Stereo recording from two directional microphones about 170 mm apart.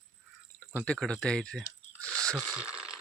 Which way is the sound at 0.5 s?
10° left (ahead or behind).